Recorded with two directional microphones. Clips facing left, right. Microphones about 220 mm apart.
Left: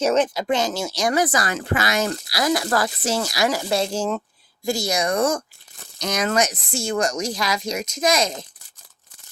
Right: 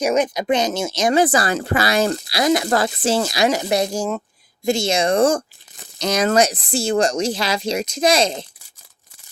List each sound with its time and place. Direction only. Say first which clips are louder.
0.0 s speech: right 1 dB; 10° right (ahead or behind)
4.6 s speech: right 4 dB; 25° right (ahead or behind)